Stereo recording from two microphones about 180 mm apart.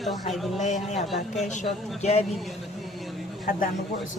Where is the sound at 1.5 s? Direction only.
40° left (ahead or behind).